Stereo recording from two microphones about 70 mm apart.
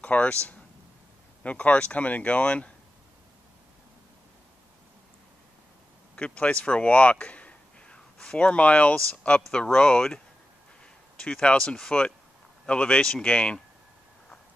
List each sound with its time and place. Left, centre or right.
0.0 s speech: centre
1.4 s speech: left
6.1 s speech: centre